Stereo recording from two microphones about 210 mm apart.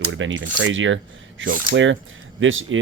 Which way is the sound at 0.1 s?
65° right (ahead or behind).